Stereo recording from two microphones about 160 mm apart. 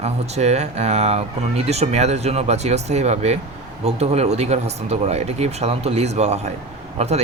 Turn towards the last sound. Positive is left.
turn(degrees=-40)  # may be behind; listen again after turning